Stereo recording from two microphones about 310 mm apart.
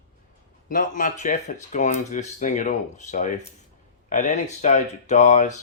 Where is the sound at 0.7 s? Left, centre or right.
Left.